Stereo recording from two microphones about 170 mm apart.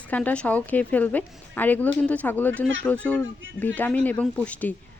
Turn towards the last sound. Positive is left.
turn(degrees=10)  # may be behind; listen again after turning